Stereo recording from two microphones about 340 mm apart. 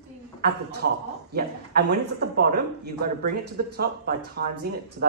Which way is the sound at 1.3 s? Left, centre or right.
Right.